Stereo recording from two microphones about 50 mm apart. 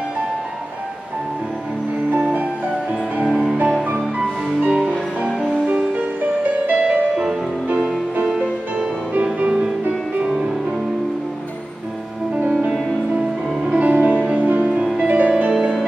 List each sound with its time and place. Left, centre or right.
2.0 s music: right
4.5 s music: centre
6.6 s music: right
10.2 s music: centre
13.7 s music: right